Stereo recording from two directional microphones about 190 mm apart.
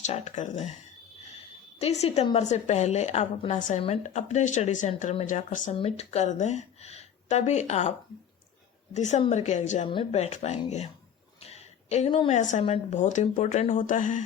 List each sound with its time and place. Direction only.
0.0 s a woman's voice: 35° left (ahead or behind)
1.8 s a woman's voice: 35° left (ahead or behind)
11.3 s a sound: 35° left (ahead or behind)
12.4 s a woman's voice: 40° left (ahead or behind)